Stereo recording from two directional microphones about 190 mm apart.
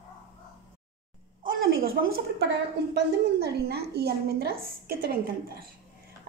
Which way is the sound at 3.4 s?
55° right (ahead or behind).